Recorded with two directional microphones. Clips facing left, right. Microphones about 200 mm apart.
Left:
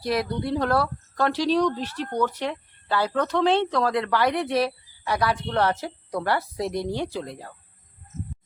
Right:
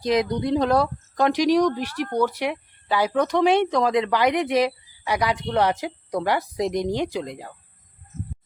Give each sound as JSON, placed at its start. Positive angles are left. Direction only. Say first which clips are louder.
{"t": 0.0, "sound": "speech", "louder": "right 4 dB", "side_deg": -20}